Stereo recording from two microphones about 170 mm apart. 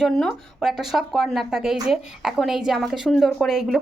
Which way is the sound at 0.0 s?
Centre (ahead or behind).